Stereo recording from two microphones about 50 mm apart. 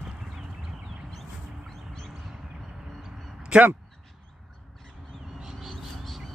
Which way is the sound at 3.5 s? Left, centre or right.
Centre.